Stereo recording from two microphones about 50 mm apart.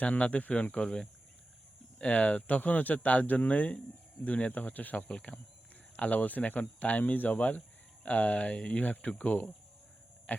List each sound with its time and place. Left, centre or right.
0.0 s speech: left
2.0 s speech: left
8.8 s speech: left
10.3 s a sound: left